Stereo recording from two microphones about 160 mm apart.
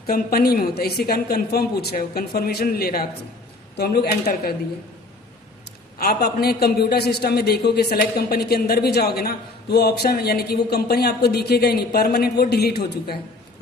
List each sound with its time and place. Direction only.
0.1 s a man's voice: 70° left (ahead or behind)
6.0 s a man's voice: 75° left (ahead or behind)